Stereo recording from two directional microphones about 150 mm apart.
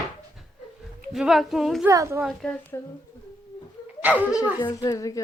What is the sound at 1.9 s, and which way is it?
Speech, 20° right (ahead or behind).